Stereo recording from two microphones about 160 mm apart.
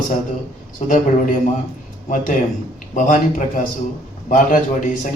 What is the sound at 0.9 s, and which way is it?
A man's voice, 55° left (ahead or behind).